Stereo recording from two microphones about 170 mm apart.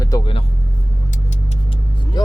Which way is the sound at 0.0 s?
20° left (ahead or behind).